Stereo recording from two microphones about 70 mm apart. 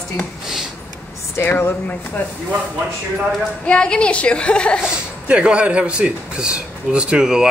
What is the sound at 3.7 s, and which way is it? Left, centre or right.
A woman's voice, centre.